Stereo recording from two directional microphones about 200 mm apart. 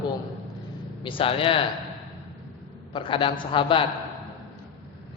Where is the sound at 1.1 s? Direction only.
25° left (ahead or behind).